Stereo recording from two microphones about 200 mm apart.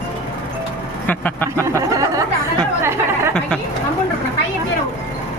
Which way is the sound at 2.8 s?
10° right (ahead or behind).